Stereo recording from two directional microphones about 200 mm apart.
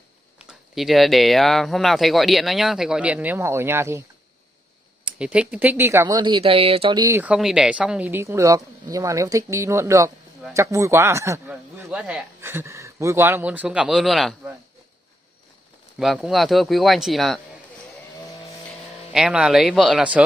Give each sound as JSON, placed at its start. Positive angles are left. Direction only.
{"t": 0.5, "sound": "speech", "side_deg": 0}
{"t": 5.0, "sound": "speech", "side_deg": -5}
{"t": 7.2, "sound": "speech", "side_deg": -5}
{"t": 16.0, "sound": "speech", "side_deg": 0}
{"t": 19.1, "sound": "speech", "side_deg": -5}